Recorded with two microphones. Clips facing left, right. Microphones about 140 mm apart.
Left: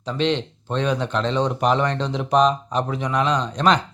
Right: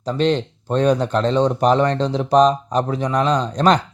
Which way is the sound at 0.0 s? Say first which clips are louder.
Right 4 dB; 40° right (ahead or behind).